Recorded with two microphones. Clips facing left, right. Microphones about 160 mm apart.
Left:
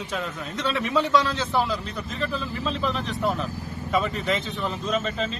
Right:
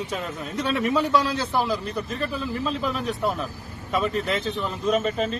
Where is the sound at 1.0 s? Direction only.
10° right (ahead or behind).